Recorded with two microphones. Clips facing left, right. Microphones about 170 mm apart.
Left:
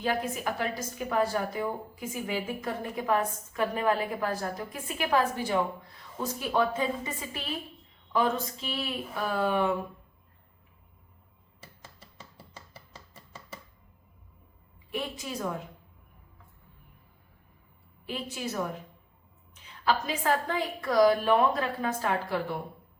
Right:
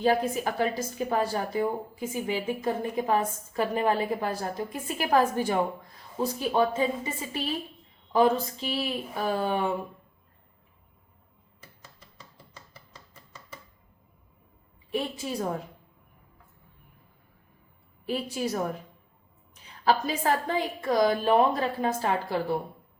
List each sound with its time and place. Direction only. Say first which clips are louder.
0.0 s a woman's voice: right 5 dB; 35° right (ahead or behind)
4.9 s a woman's voice: right 3 dB; 45° right (ahead or behind)
6.5 s a woman's voice: right 1 dB; 25° right (ahead or behind)
14.9 s a woman's voice: right 4 dB; 30° right (ahead or behind)
18.0 s a woman's voice: right 5 dB; 40° right (ahead or behind)